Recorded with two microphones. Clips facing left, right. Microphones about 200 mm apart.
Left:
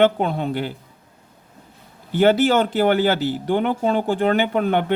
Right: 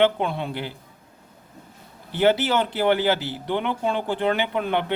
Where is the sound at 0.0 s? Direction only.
45° left (ahead or behind).